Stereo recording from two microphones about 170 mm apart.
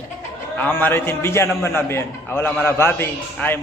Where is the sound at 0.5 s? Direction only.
10° left (ahead or behind).